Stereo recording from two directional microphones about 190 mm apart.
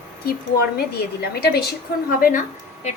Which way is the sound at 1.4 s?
55° left (ahead or behind).